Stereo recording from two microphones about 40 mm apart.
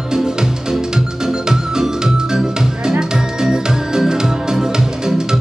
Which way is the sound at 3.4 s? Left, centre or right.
Centre.